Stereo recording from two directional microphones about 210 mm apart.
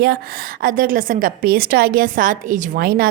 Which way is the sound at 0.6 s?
45° right (ahead or behind).